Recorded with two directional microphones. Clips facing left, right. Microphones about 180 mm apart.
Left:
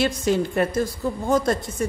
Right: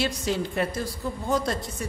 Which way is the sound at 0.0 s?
50° left (ahead or behind).